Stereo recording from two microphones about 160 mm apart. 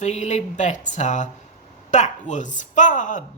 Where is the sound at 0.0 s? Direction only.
45° left (ahead or behind).